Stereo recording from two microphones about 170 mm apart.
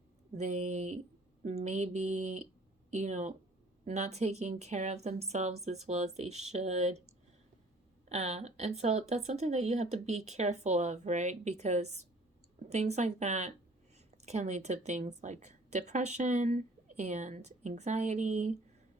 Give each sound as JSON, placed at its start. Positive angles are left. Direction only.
{"t": 0.3, "sound": "a woman's voice", "side_deg": -40}
{"t": 8.1, "sound": "a woman's voice", "side_deg": -40}